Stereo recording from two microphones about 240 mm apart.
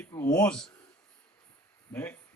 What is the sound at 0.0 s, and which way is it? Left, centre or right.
Speech, centre.